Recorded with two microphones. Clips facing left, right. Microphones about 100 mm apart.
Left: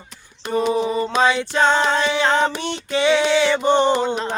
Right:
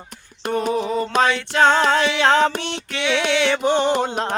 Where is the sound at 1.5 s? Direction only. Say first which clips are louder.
Right 4 dB; 70° right (ahead or behind).